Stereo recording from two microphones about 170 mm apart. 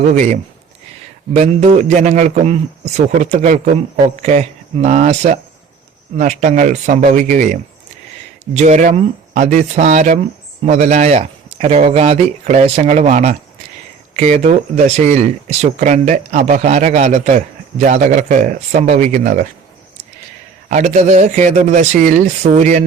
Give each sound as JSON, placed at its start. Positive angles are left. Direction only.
{"t": 0.0, "sound": "speech", "side_deg": -45}
{"t": 20.7, "sound": "speech", "side_deg": -45}